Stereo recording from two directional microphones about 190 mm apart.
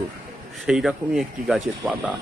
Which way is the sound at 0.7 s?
Centre (ahead or behind).